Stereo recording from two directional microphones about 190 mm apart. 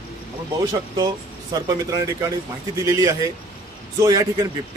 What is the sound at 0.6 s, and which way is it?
Speech, 20° right (ahead or behind).